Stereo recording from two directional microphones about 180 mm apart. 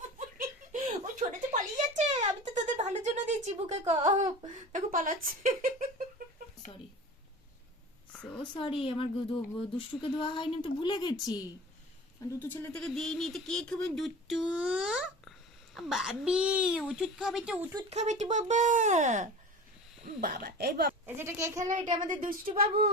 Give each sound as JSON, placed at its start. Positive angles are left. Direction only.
{"t": 0.2, "sound": "giggle", "side_deg": -45}
{"t": 4.5, "sound": "a sound", "side_deg": -45}
{"t": 8.1, "sound": "a sound", "side_deg": 5}
{"t": 8.4, "sound": "speech", "side_deg": 30}
{"t": 12.4, "sound": "speech", "side_deg": 10}
{"t": 17.8, "sound": "speech", "side_deg": -40}
{"t": 20.2, "sound": "speech", "side_deg": -60}
{"t": 21.2, "sound": "a child's voice", "side_deg": -15}
{"t": 21.6, "sound": "speech", "side_deg": -45}